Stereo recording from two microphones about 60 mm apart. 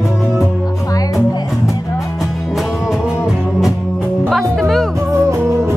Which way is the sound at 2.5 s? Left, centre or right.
Centre.